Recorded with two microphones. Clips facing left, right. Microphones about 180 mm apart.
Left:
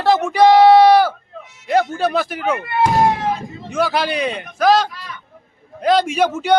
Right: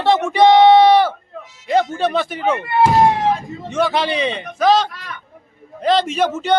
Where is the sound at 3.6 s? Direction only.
10° left (ahead or behind).